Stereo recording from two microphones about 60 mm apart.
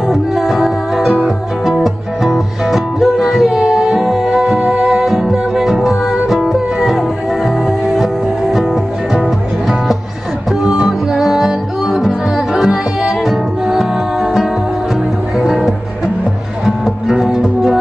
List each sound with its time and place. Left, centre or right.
0.1 s music: centre